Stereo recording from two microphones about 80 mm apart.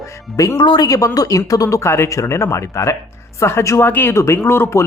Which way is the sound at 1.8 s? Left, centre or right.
Left.